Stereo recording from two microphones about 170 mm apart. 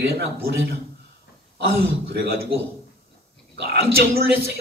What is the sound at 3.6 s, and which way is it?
Speech, 65° right (ahead or behind).